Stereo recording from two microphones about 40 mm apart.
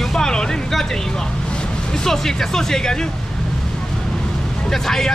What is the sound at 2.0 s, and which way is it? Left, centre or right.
Speech, centre.